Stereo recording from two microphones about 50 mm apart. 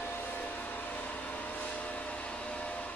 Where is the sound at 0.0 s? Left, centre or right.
Left.